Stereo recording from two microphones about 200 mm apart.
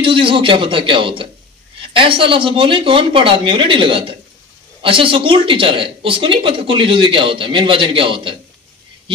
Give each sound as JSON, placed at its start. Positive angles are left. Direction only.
{"t": 0.0, "sound": "speech", "side_deg": -25}